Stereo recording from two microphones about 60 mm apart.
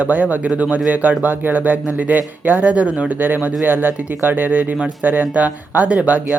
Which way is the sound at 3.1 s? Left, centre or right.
Right.